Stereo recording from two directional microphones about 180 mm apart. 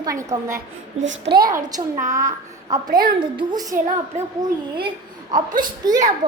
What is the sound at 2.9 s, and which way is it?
Speech, 55° right (ahead or behind).